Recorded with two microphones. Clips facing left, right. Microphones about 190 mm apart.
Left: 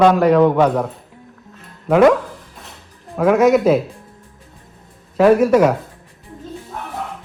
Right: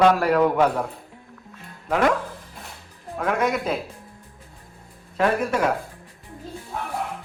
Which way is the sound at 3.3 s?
Centre (ahead or behind).